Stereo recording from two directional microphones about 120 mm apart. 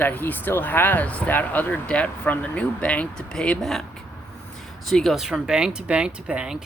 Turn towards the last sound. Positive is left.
turn(degrees=-10)  # may be behind; listen again after turning